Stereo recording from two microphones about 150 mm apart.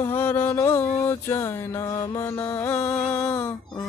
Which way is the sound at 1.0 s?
15° left (ahead or behind).